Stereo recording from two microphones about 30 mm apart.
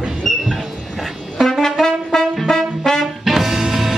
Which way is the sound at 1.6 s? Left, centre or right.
Centre.